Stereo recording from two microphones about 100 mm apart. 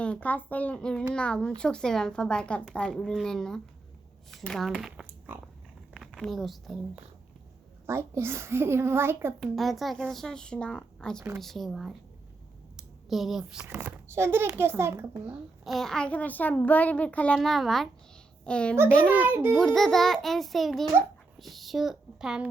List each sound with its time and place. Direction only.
0.0 s a child's voice: 15° left (ahead or behind); by 5.0 s 5° right (ahead or behind)
6.1 s speech: 5° left (ahead or behind)
7.9 s a child's voice: 25° right (ahead or behind)
9.4 s speech: centre (ahead or behind)
12.7 s a sound: centre (ahead or behind)
13.7 s a child's voice: 20° right (ahead or behind)
15.6 s a child's voice: centre (ahead or behind)
17.4 s a child's voice: centre (ahead or behind)
19.1 s a child's voice: 20° right (ahead or behind)
19.5 s speech: 5° left (ahead or behind)